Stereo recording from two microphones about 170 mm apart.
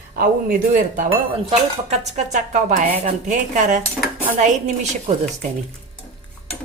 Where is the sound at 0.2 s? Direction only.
55° right (ahead or behind).